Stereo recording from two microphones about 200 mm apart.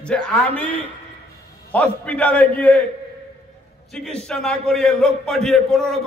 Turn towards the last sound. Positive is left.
turn(degrees=0)  # may be behind; listen again after turning